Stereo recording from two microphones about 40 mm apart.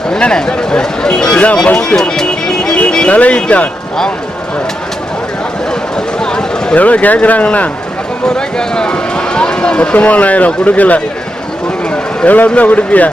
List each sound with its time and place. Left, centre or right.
0.1 s speech: centre
2.0 s speech: centre
2.2 s music: centre
3.1 s speech: left
6.1 s a sound: centre
6.7 s speech: left
8.4 s speech: left
11.9 s a sound: left
12.5 s speech: left